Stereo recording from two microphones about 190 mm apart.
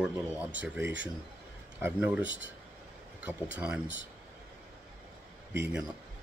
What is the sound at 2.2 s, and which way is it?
Speech, 75° right (ahead or behind).